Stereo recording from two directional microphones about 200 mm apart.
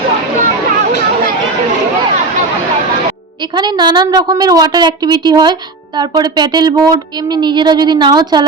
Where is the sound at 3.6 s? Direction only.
20° right (ahead or behind).